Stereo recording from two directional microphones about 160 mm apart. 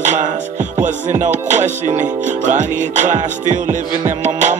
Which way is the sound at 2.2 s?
50° right (ahead or behind).